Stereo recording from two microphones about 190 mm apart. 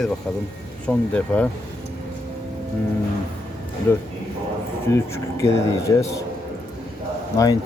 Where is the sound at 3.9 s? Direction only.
15° left (ahead or behind).